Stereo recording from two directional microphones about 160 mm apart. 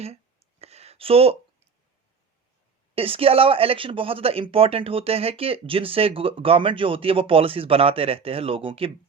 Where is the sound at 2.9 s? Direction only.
35° right (ahead or behind).